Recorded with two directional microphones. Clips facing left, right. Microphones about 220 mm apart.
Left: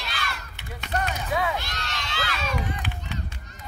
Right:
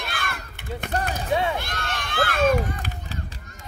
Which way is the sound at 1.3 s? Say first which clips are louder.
Right 4 dB; 30° right (ahead or behind).